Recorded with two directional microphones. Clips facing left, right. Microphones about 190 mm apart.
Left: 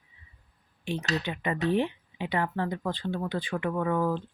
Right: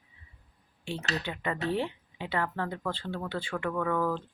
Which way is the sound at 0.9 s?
15° left (ahead or behind).